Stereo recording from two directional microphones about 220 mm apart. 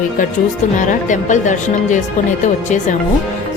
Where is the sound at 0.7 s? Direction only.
35° left (ahead or behind).